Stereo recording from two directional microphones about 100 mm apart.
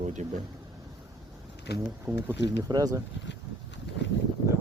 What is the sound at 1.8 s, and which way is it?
Speech, 20° right (ahead or behind).